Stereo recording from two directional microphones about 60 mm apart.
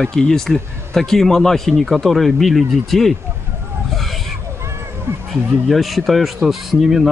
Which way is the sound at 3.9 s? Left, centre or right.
Centre.